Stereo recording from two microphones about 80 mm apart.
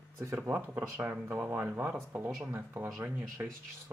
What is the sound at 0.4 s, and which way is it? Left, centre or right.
Speech, right.